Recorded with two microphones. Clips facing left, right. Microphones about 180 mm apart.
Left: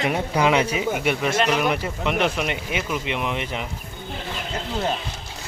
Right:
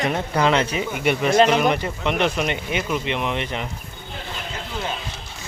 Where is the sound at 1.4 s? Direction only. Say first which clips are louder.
Right 8 dB; 35° right (ahead or behind).